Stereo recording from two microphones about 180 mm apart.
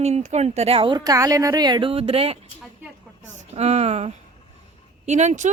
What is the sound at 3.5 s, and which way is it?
Speech, 35° right (ahead or behind).